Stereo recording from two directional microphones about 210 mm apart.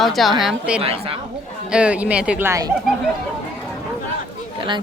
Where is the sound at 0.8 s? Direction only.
25° right (ahead or behind).